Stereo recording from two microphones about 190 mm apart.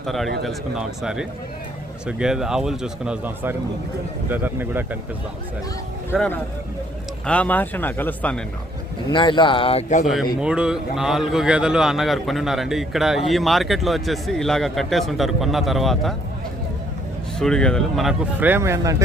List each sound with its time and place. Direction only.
0.0 s a man's voice: centre (ahead or behind)
6.1 s speech: 10° left (ahead or behind)
9.0 s speech: 25° left (ahead or behind)
10.4 s a man's voice: 5° right (ahead or behind)
17.4 s a man's voice: 5° left (ahead or behind); by 19.0 s 15° right (ahead or behind)